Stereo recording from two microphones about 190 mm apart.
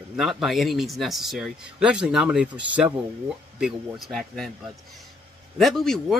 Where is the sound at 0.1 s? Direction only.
Centre (ahead or behind).